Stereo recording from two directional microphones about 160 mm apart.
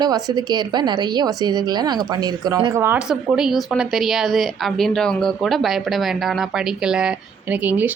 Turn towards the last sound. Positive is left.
turn(degrees=-10)  # may be behind; listen again after turning